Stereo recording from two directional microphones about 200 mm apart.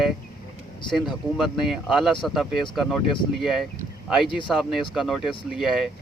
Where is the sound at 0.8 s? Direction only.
25° left (ahead or behind).